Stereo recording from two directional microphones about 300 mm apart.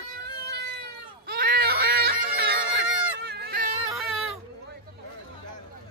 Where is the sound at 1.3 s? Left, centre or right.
Right.